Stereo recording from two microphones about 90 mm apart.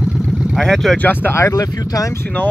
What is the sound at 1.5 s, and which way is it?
Speech, 45° left (ahead or behind).